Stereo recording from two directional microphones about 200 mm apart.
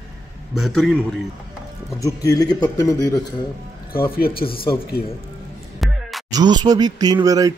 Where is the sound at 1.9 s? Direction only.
15° left (ahead or behind).